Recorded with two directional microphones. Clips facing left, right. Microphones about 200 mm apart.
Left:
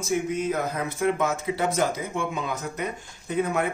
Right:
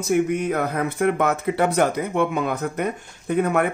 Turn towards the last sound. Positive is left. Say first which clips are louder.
# right 5 dB
turn(degrees=-60)  # may be behind; listen again after turning